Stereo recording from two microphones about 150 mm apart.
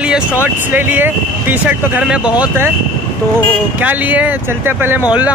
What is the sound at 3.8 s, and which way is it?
Speech, 10° right (ahead or behind).